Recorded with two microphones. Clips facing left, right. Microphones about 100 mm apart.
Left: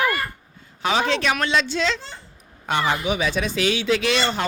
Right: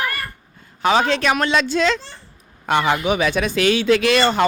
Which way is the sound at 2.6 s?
65° right (ahead or behind).